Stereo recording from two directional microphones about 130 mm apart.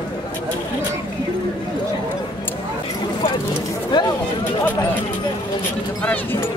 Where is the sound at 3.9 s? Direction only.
35° left (ahead or behind).